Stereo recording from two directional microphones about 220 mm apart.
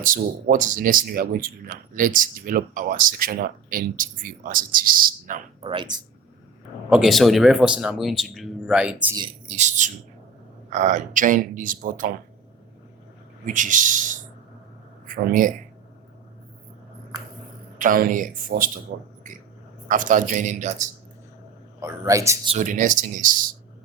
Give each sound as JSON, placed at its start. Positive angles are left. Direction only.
{"t": 0.0, "sound": "speech", "side_deg": -40}
{"t": 6.9, "sound": "a man's voice", "side_deg": 0}
{"t": 9.1, "sound": "speech", "side_deg": -25}
{"t": 13.4, "sound": "speech", "side_deg": -35}
{"t": 17.7, "sound": "speech", "side_deg": -40}
{"t": 19.9, "sound": "speech", "side_deg": -35}
{"t": 21.8, "sound": "speech", "side_deg": -15}
{"t": 22.4, "sound": "speech", "side_deg": -35}